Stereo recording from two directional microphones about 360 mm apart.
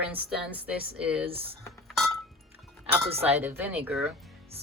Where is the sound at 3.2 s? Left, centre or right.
Centre.